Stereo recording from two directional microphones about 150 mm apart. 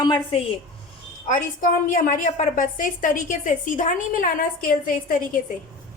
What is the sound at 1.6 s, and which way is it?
A woman's voice, 65° left (ahead or behind).